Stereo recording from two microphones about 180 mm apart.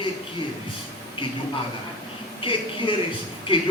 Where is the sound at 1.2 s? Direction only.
30° left (ahead or behind).